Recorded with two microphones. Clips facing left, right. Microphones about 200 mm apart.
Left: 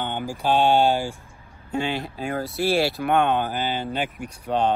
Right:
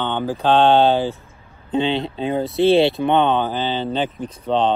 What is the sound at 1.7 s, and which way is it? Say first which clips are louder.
Speech: right 6 dB; 20° right (ahead or behind).